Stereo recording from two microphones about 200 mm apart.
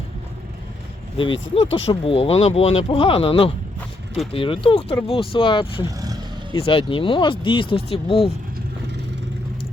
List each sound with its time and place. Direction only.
1.5 s speech: 30° left (ahead or behind)